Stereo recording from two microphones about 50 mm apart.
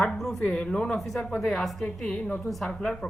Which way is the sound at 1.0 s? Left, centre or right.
Centre.